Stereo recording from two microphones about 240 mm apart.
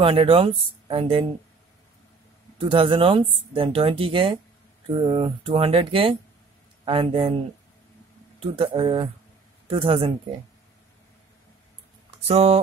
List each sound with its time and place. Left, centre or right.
0.0 s speech: right
2.6 s speech: right
8.4 s speech: right
12.3 s speech: right